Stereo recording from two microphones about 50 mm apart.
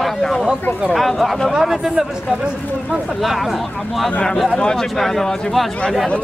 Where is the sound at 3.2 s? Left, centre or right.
Centre.